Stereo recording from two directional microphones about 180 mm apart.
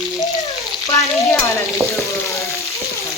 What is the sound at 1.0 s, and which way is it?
Speech, centre (ahead or behind).